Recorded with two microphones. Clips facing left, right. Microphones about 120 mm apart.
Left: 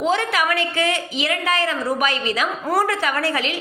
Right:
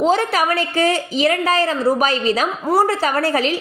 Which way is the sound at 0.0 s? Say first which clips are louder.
Right 4 dB; 35° right (ahead or behind).